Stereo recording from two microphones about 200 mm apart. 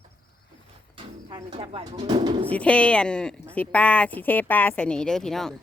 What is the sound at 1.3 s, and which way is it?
Speech, 25° right (ahead or behind).